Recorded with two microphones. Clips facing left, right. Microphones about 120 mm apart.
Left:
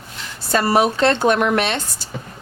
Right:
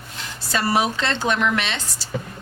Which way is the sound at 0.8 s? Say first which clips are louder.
Left 7 dB; 55° left (ahead or behind).